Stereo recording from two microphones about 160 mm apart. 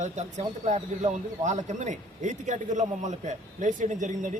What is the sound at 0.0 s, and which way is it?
A man's voice, 45° right (ahead or behind).